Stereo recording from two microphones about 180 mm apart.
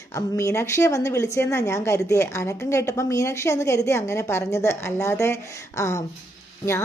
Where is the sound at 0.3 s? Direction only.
15° left (ahead or behind).